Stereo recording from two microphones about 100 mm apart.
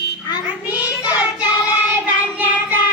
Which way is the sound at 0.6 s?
40° left (ahead or behind).